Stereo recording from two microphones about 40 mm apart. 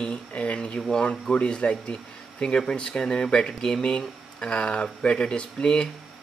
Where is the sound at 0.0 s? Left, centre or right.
Left.